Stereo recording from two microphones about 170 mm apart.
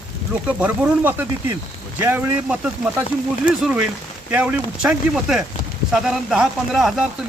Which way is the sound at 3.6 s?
5° right (ahead or behind).